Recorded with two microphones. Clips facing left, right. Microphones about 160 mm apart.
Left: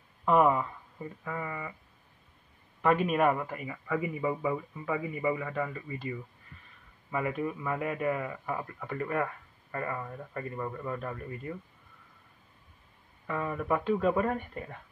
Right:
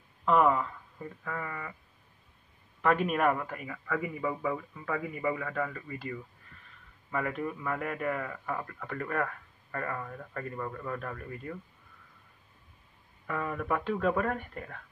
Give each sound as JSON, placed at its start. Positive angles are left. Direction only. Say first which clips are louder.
{"t": 0.2, "sound": "speech", "louder": "left 1 dB", "side_deg": 10}
{"t": 2.8, "sound": "a man's voice", "louder": "left 1 dB", "side_deg": 5}
{"t": 5.9, "sound": "speech", "louder": "left 2 dB", "side_deg": 20}
{"t": 7.1, "sound": "a man's voice", "louder": "left 1 dB", "side_deg": 10}
{"t": 13.3, "sound": "a man's voice", "louder": "left 1 dB", "side_deg": 5}